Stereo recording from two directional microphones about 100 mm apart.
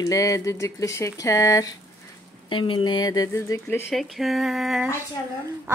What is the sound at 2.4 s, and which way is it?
Speech, 55° left (ahead or behind).